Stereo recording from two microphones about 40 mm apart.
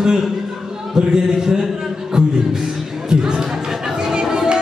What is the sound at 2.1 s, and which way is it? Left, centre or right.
Music, right.